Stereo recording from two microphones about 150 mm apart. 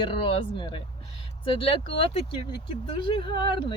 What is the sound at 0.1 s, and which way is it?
Speech, 35° left (ahead or behind).